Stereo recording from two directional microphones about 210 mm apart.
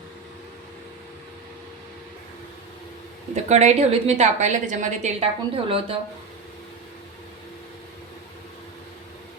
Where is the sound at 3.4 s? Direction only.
35° right (ahead or behind).